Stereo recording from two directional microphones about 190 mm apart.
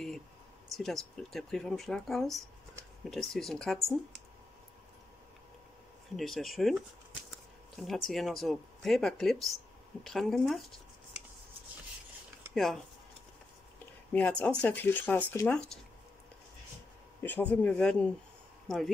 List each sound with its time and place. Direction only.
0.7 s speech: centre (ahead or behind)
6.1 s speech: centre (ahead or behind)
12.5 s speech: centre (ahead or behind)
14.1 s speech: 10° left (ahead or behind)
17.2 s speech: 10° left (ahead or behind)